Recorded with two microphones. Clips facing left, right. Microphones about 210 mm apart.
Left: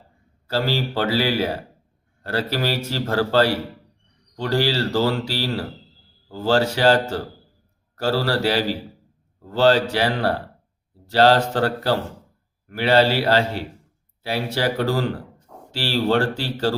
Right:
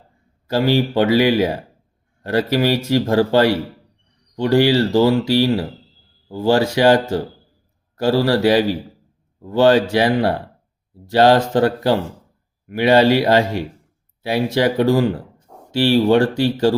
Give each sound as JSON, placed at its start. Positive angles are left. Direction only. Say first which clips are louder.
{"t": 0.4, "sound": "speech", "louder": "right 6 dB", "side_deg": -15}